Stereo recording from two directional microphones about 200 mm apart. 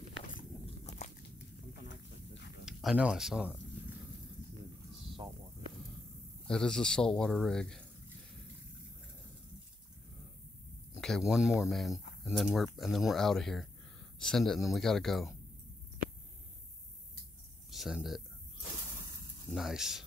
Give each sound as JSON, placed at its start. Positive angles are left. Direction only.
{"t": 0.7, "sound": "biting", "side_deg": 35}
{"t": 1.7, "sound": "a sound", "side_deg": 60}
{"t": 2.6, "sound": "speech", "side_deg": 0}
{"t": 6.4, "sound": "speech", "side_deg": 5}
{"t": 11.0, "sound": "speech", "side_deg": 0}
{"t": 17.6, "sound": "speech", "side_deg": 0}
{"t": 19.5, "sound": "speech", "side_deg": 0}